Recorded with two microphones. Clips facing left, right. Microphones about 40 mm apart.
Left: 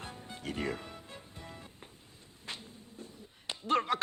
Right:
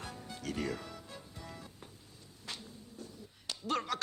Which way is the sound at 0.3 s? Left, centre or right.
Left.